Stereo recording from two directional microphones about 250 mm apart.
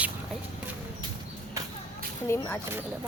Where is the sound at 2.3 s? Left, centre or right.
Centre.